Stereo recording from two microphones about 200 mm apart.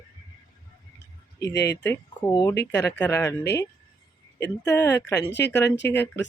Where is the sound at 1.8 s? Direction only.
15° left (ahead or behind).